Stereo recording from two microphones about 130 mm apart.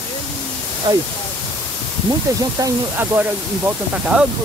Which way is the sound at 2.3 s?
25° right (ahead or behind).